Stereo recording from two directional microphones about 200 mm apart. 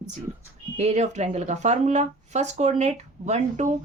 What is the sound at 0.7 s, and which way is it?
Speech, 35° right (ahead or behind).